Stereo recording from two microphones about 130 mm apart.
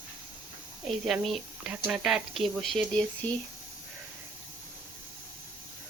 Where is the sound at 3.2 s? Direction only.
10° left (ahead or behind).